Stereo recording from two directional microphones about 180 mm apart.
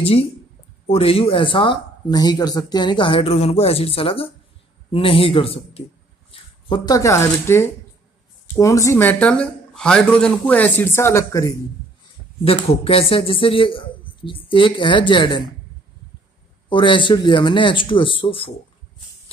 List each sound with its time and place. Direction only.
0.8 s a man's voice: 30° left (ahead or behind); by 11.5 s 15° left (ahead or behind)
12.4 s speech: 30° left (ahead or behind)
16.6 s speech: 25° left (ahead or behind)